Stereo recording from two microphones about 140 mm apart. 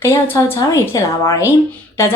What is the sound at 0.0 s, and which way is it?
Speech, 20° left (ahead or behind).